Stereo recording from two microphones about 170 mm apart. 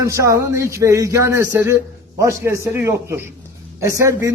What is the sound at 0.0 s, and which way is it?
A man's voice, 15° right (ahead or behind).